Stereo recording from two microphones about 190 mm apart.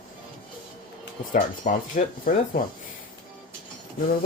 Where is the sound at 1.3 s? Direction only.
45° left (ahead or behind).